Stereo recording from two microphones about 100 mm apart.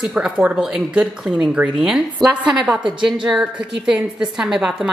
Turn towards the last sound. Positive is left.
turn(degrees=-5)  # may be behind; listen again after turning